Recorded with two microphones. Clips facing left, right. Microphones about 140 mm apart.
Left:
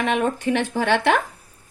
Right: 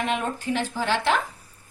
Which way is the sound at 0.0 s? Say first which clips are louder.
Left 5 dB; 65° left (ahead or behind).